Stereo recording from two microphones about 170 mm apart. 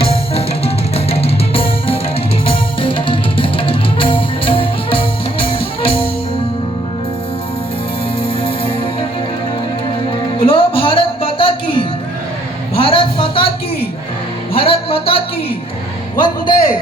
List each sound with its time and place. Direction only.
0.0 s music: 35° left (ahead or behind)
8.4 s music: 30° left (ahead or behind)
10.4 s music: 30° left (ahead or behind)
12.7 s a sound: 35° left (ahead or behind)
14.5 s music: 35° left (ahead or behind)
16.1 s a sound: 30° left (ahead or behind)